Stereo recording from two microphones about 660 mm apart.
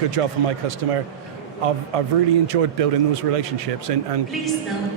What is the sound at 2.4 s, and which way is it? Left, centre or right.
Speech, right.